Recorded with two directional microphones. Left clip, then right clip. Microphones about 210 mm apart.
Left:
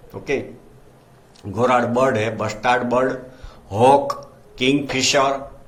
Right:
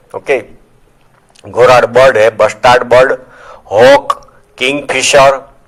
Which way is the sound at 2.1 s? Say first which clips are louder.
Right 15 dB; 45° right (ahead or behind).